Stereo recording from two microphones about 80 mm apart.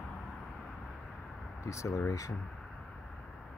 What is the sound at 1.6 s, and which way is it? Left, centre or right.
Speech, left.